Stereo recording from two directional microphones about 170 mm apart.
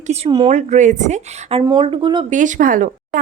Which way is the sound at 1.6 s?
25° right (ahead or behind).